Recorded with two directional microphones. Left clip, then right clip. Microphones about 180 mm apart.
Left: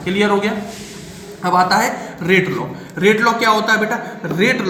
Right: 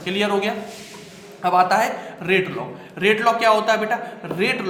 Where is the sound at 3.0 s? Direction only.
35° right (ahead or behind).